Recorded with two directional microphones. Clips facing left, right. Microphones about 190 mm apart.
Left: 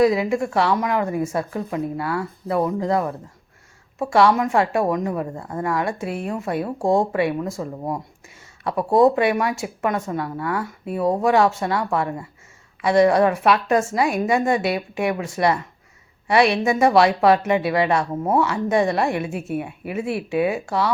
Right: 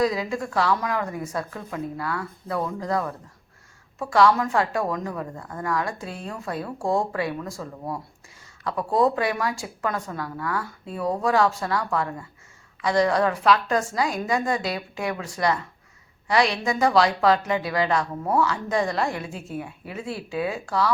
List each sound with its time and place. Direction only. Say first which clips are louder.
0.0 s a woman's voice: left 6 dB; 25° left (ahead or behind)
20.3 s a woman's voice: left 5 dB; 25° left (ahead or behind)